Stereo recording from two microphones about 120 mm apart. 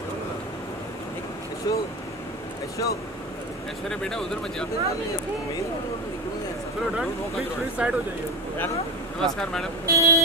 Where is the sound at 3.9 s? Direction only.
5° left (ahead or behind).